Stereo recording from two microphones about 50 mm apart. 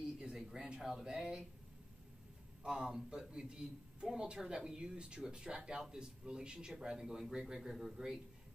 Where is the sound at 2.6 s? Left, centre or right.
Centre.